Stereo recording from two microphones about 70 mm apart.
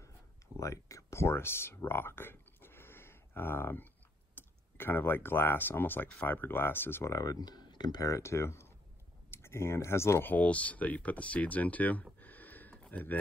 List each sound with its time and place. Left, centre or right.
0.6 s speech: left
7.1 s speech: left
8.0 s speech: left
10.2 s speech: left